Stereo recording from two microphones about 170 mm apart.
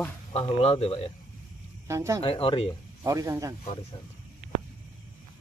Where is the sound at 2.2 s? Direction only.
35° left (ahead or behind).